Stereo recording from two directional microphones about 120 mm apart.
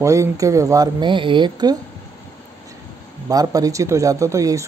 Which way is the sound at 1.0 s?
45° right (ahead or behind).